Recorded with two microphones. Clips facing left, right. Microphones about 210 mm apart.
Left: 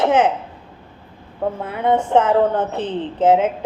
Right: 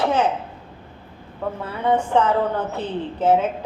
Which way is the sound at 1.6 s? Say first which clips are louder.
Left 1 dB; 20° left (ahead or behind).